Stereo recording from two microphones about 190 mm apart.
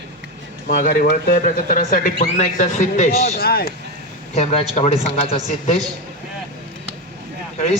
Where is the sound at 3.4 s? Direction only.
55° left (ahead or behind).